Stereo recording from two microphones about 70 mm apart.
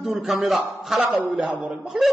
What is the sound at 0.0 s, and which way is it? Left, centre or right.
A man's voice, centre.